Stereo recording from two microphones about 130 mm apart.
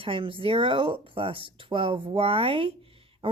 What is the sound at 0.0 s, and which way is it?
A woman's voice, 45° right (ahead or behind).